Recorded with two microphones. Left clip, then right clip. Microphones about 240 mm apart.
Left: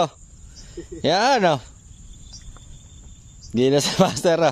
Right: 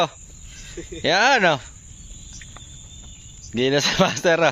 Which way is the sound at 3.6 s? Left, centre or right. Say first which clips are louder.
Left 1 dB; left.